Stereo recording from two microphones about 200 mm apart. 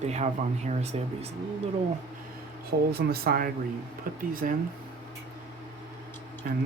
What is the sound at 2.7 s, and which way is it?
Speech, 50° right (ahead or behind).